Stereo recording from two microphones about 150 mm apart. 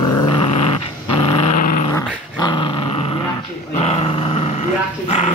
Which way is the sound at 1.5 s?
60° left (ahead or behind).